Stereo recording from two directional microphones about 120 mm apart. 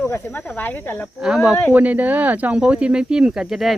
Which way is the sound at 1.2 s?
5° right (ahead or behind).